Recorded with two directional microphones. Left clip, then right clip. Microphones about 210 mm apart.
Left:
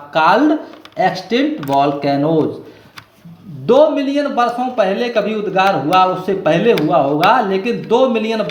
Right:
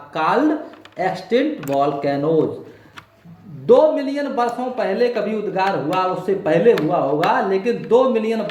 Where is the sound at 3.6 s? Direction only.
50° left (ahead or behind).